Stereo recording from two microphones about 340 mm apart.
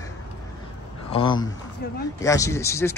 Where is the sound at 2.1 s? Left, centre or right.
Centre.